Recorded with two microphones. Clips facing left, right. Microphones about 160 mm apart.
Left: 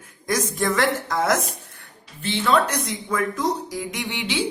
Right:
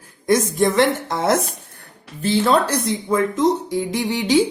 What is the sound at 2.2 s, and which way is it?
Speech, 40° right (ahead or behind).